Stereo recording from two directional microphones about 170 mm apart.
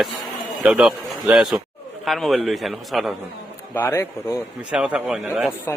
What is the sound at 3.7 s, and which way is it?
Speech, 15° left (ahead or behind).